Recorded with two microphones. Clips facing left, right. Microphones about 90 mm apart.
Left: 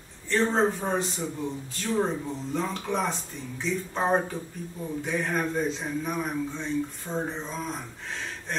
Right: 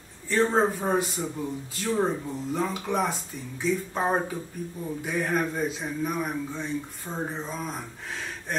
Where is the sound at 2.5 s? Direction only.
5° right (ahead or behind).